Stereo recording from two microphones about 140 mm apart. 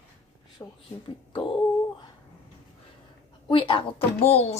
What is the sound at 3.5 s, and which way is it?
Speech, 40° left (ahead or behind).